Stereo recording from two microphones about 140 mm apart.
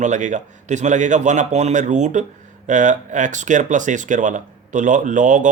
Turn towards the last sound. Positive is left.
turn(degrees=-60)  # may be behind; listen again after turning